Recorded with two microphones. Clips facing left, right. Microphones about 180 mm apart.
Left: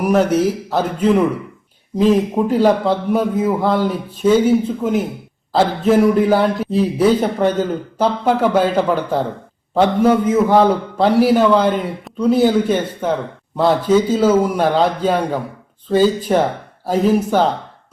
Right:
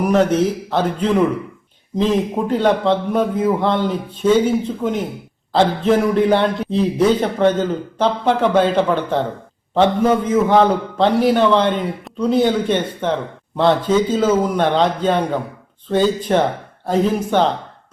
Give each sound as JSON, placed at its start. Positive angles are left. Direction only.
{"t": 0.0, "sound": "a man's voice", "side_deg": 10}